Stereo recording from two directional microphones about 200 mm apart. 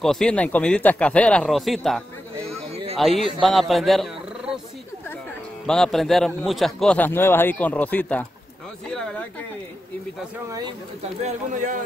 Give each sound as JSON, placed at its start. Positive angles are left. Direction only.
{"t": 0.0, "sound": "speech", "side_deg": 0}
{"t": 2.7, "sound": "a sound", "side_deg": -30}
{"t": 3.4, "sound": "speech", "side_deg": 0}
{"t": 5.7, "sound": "speech", "side_deg": 0}
{"t": 8.8, "sound": "a sound", "side_deg": 5}
{"t": 11.2, "sound": "speech", "side_deg": -40}